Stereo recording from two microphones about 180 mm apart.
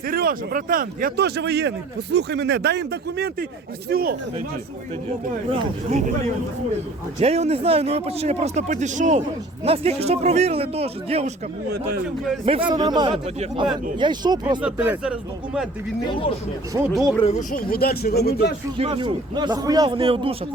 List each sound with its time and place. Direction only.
0.1 s speech: 55° right (ahead or behind)
7.2 s speech: 35° right (ahead or behind)
12.5 s a man's voice: 30° right (ahead or behind)
14.6 s speech: 5° right (ahead or behind)
16.9 s speech: centre (ahead or behind)
17.2 s speech: 40° left (ahead or behind)
17.7 s speech: 60° left (ahead or behind)
18.8 s a man's voice: 30° right (ahead or behind)